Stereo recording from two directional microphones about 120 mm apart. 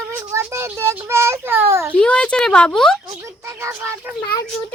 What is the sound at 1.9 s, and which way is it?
Speech, 10° left (ahead or behind).